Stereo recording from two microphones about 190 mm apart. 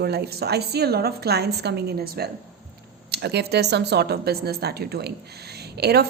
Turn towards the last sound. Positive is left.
turn(degrees=-60)  # may be behind; listen again after turning